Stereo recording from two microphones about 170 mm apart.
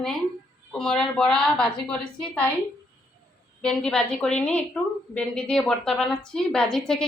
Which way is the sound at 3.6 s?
5° left (ahead or behind).